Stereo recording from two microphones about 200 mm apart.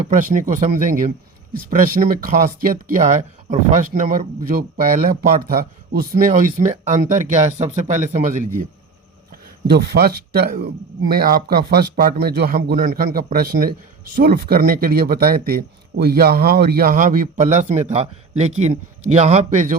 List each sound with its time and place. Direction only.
0.1 s a man's voice: 40° right (ahead or behind)
9.6 s a man's voice: 55° right (ahead or behind); by 19.7 s 35° right (ahead or behind)